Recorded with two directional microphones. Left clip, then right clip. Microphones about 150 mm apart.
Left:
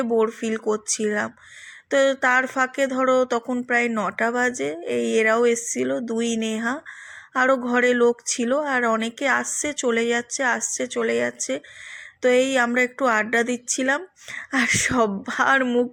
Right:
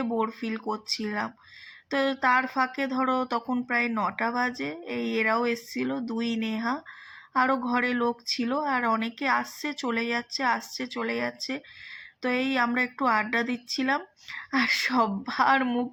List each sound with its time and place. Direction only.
0.0 s speech: 30° left (ahead or behind)